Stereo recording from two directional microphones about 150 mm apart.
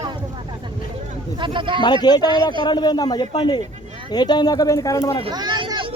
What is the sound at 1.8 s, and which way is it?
Speech, 30° left (ahead or behind).